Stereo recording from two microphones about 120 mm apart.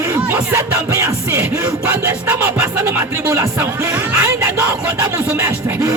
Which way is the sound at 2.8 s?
20° right (ahead or behind).